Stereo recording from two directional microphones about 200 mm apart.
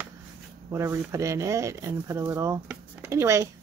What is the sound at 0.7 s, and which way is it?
Speech, 15° right (ahead or behind).